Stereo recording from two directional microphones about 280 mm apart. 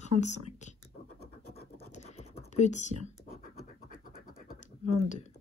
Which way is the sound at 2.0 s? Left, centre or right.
Left.